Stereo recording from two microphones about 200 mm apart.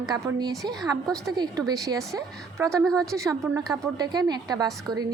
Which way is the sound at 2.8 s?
5° left (ahead or behind).